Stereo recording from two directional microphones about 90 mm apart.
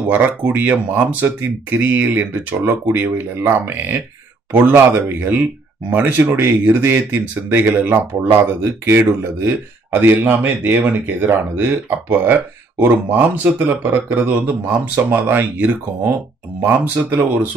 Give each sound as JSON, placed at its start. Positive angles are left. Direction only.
{"t": 0.1, "sound": "speech", "side_deg": -20}